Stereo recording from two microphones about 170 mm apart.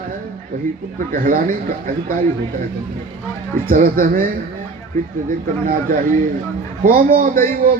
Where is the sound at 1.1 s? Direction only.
55° right (ahead or behind).